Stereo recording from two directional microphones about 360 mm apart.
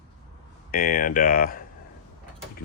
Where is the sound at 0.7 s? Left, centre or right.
Left.